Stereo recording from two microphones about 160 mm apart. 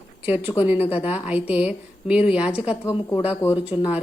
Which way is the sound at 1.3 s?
10° right (ahead or behind).